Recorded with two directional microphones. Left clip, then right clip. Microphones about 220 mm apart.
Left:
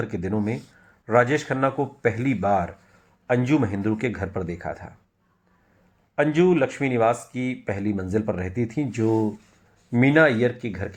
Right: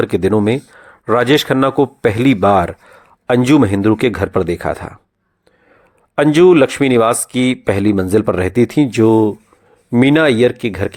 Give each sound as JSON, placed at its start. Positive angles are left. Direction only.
{"t": 0.0, "sound": "speech", "side_deg": -35}
{"t": 6.1, "sound": "speech", "side_deg": -45}